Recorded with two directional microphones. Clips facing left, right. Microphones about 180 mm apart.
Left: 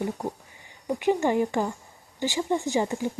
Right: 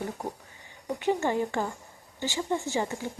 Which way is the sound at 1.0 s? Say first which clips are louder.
Left 4 dB; 15° left (ahead or behind).